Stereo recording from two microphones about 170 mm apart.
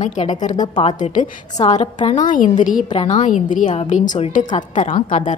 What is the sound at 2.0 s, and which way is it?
Speech, 50° left (ahead or behind).